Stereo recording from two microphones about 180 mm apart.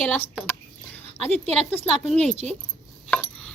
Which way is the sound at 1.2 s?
35° right (ahead or behind).